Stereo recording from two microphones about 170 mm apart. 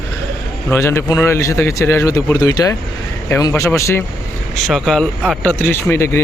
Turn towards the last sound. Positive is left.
turn(degrees=15)  # may be behind; listen again after turning